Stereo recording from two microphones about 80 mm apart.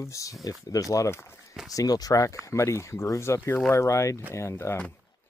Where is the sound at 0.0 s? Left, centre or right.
Left.